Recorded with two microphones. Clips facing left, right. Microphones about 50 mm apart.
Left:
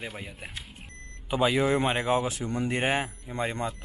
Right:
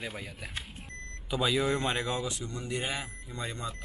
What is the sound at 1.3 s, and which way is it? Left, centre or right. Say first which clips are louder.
Speech: left 4 dB; left.